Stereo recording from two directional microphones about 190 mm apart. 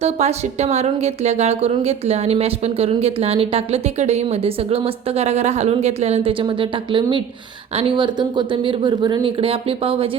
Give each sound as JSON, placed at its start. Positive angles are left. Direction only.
{"t": 0.0, "sound": "a woman's voice", "side_deg": -35}